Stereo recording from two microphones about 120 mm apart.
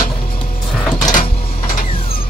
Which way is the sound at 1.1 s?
90° left.